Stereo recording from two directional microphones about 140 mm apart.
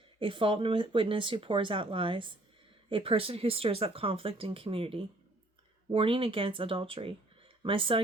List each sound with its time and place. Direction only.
0.2 s speech: 40° right (ahead or behind)